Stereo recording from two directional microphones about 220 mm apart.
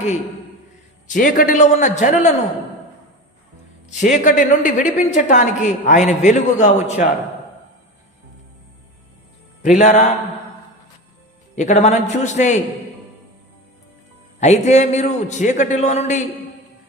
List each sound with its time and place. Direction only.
1.0 s a woman's voice: 35° left (ahead or behind)
3.8 s a woman's voice: 35° left (ahead or behind)
9.6 s a woman's voice: 35° left (ahead or behind)
11.5 s a woman's voice: 35° left (ahead or behind)
14.3 s a woman's voice: 30° left (ahead or behind)